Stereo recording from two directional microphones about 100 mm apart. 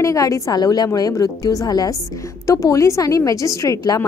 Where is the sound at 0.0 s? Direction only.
35° left (ahead or behind).